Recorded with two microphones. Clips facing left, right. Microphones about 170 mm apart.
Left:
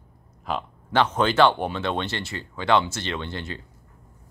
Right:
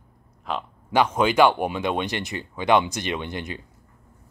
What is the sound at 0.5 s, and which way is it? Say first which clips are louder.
Speech: left 1 dB; centre (ahead or behind).